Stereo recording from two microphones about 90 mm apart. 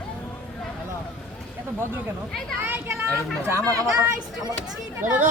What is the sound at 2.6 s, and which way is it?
Speech, 30° right (ahead or behind).